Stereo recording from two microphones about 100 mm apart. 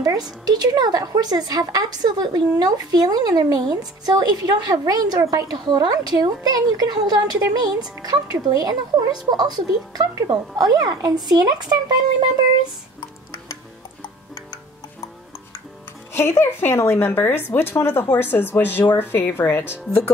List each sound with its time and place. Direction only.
0.0 s speech: 40° right (ahead or behind)
14.3 s music: 35° left (ahead or behind)
16.1 s speech: 25° left (ahead or behind)